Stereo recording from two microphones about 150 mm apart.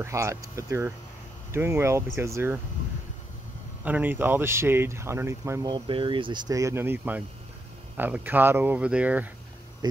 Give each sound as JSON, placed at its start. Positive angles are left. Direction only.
{"t": 0.0, "sound": "speech", "side_deg": -20}
{"t": 3.8, "sound": "speech", "side_deg": -10}